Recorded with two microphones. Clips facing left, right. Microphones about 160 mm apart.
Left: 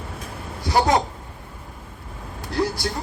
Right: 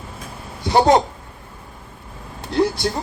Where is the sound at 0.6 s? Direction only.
25° right (ahead or behind).